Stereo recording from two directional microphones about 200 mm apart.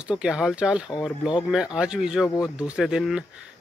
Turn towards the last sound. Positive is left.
turn(degrees=-5)  # may be behind; listen again after turning